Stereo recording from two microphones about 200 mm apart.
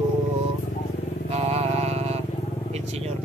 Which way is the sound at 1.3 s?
30° right (ahead or behind).